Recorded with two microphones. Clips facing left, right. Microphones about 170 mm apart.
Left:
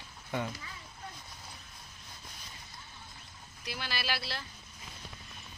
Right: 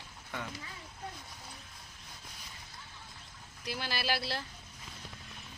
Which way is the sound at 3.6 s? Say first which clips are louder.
Right 2 dB; 40° right (ahead or behind).